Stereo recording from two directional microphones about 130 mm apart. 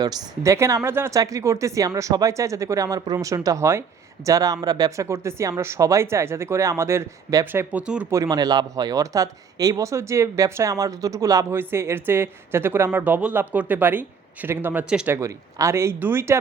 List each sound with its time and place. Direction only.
0.0 s speech: 30° right (ahead or behind)
7.5 s speech: 15° right (ahead or behind)
8.1 s speech: 25° right (ahead or behind); by 15.1 s 10° right (ahead or behind)
15.1 s speech: 25° right (ahead or behind)